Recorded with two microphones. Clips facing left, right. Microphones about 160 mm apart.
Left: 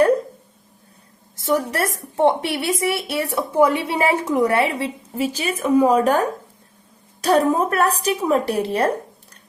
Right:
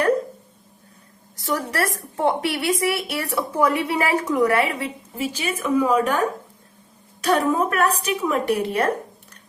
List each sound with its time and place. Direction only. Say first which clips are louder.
1.4 s a woman's voice: left 3 dB; 20° left (ahead or behind)